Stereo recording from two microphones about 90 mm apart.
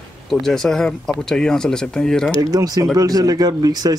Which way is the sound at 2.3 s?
40° right (ahead or behind).